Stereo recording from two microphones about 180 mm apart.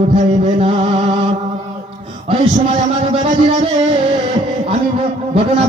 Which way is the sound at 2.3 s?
30° right (ahead or behind).